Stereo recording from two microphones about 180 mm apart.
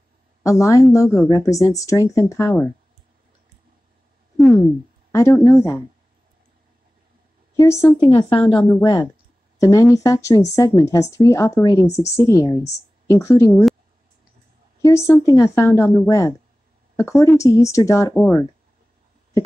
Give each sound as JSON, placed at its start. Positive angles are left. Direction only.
{"t": 0.4, "sound": "speech", "side_deg": 15}
{"t": 5.1, "sound": "speech", "side_deg": 15}
{"t": 7.5, "sound": "a woman's voice", "side_deg": 15}
{"t": 8.3, "sound": "a woman's voice", "side_deg": 30}
{"t": 8.6, "sound": "speech", "side_deg": 15}
{"t": 14.8, "sound": "speech", "side_deg": 15}